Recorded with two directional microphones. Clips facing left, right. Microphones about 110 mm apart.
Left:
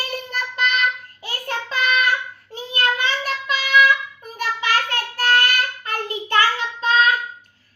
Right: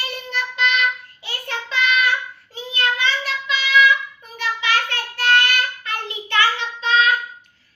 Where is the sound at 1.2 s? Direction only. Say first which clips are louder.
Left 2 dB; 45° left (ahead or behind).